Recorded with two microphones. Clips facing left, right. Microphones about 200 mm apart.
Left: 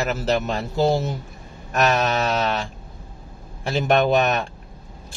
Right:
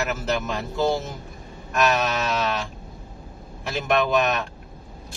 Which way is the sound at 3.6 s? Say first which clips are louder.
Left 4 dB; 30° left (ahead or behind).